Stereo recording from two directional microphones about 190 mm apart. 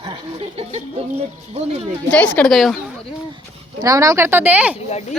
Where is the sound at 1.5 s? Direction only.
35° right (ahead or behind).